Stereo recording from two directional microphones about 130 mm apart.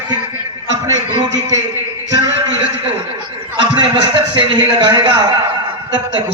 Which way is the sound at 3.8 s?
35° right (ahead or behind).